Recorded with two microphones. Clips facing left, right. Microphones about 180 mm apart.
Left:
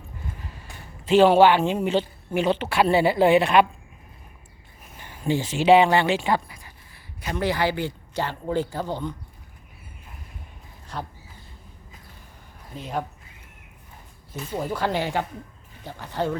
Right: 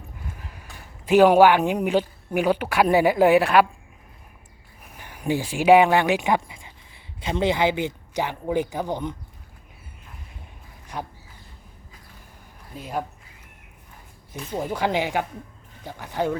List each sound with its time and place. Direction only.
0.3 s a sound: 10° right (ahead or behind)
1.0 s speech: 15° right (ahead or behind)
4.9 s a man's voice: 15° right (ahead or behind)
10.9 s speech: 15° right (ahead or behind)
12.7 s speech: 5° right (ahead or behind)
14.5 s speech: 15° right (ahead or behind)